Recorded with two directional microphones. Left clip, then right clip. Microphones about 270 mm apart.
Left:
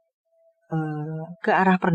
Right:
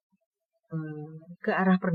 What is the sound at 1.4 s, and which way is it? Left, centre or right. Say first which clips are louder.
Speech: left 7 dB; left.